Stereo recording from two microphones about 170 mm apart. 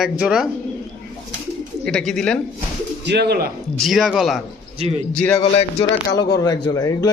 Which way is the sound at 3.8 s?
Centre (ahead or behind).